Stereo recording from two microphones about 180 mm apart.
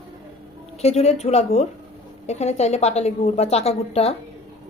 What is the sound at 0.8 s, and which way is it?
A woman's voice, 35° left (ahead or behind).